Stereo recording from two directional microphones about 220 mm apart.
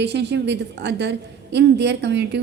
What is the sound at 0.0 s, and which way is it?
A woman's voice, 50° right (ahead or behind).